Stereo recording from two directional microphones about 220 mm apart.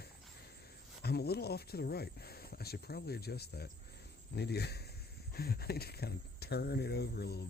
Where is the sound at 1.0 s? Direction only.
45° left (ahead or behind).